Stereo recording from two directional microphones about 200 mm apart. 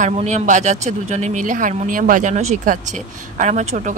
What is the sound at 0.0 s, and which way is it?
Speech, 40° right (ahead or behind).